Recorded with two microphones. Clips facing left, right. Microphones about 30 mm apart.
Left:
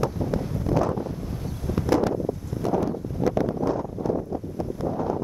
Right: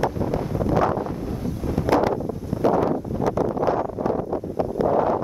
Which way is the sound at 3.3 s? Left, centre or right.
Centre.